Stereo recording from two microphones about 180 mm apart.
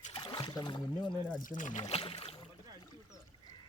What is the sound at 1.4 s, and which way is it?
Speech, 45° left (ahead or behind).